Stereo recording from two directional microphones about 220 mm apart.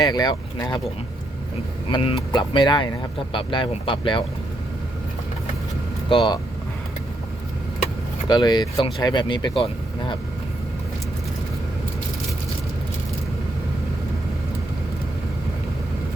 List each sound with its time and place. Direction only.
0.0 s speech: 20° left (ahead or behind)
1.9 s speech: 25° left (ahead or behind)
6.1 s speech: 20° left (ahead or behind)
8.3 s speech: 20° left (ahead or behind)